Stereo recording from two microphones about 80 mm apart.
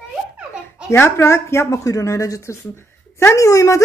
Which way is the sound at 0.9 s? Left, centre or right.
Left.